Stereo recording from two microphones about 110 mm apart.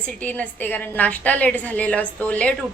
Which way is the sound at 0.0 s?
15° left (ahead or behind).